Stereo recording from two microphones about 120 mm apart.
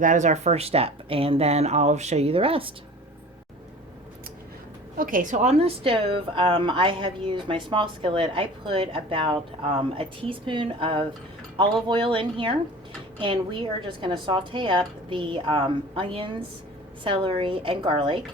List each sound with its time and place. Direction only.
0.0 s speech: 85° right; by 2.7 s 50° right (ahead or behind)
5.2 s a woman's voice: 85° right; by 18.2 s 45° right (ahead or behind)